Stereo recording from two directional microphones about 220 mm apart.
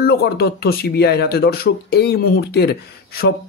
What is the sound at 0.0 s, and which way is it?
A man's voice, 45° left (ahead or behind).